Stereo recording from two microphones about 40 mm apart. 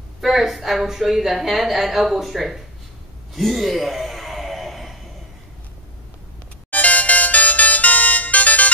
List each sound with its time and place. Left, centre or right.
0.2 s a woman's voice: centre
3.3 s gasp: centre
6.7 s music: left